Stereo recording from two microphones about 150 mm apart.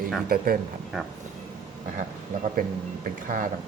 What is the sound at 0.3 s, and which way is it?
Speech, 80° right.